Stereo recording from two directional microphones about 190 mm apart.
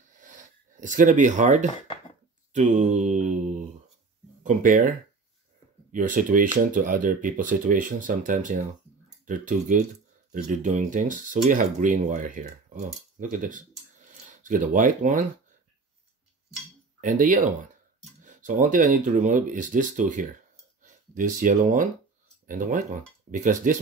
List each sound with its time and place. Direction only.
0.2 s a sound: 45° right (ahead or behind)
2.5 s mantra: 40° right (ahead or behind)
4.4 s speech: 45° right (ahead or behind)
17.0 s speech: 45° right (ahead or behind)